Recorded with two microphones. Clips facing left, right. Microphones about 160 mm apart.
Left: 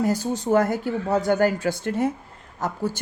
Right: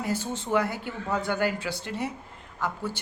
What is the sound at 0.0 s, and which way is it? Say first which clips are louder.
Speech: left 7 dB; 40° left (ahead or behind).